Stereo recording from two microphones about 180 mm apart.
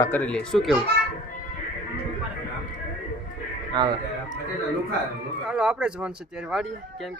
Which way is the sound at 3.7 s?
25° right (ahead or behind).